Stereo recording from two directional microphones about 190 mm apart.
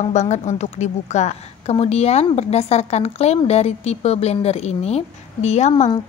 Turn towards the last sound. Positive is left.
turn(degrees=35)  # may be behind; listen again after turning